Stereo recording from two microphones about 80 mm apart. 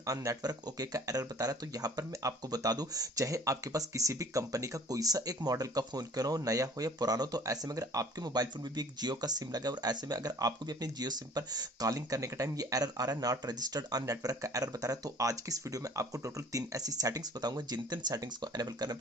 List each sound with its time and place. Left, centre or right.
0.3 s speech: right